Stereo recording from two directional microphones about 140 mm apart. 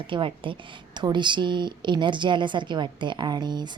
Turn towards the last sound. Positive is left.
turn(degrees=-30)  # may be behind; listen again after turning